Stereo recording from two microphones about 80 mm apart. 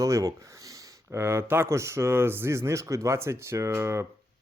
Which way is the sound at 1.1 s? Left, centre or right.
Right.